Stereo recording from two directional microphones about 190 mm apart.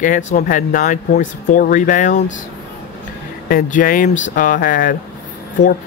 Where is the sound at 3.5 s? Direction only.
45° left (ahead or behind).